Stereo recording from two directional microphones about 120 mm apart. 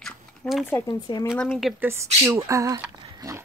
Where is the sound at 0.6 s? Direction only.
20° left (ahead or behind).